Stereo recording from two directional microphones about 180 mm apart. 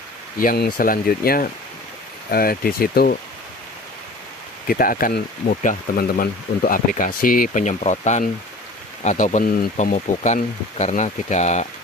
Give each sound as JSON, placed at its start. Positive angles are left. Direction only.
{"t": 0.4, "sound": "speech", "side_deg": 55}
{"t": 4.6, "sound": "speech", "side_deg": 50}
{"t": 9.9, "sound": "speech", "side_deg": 40}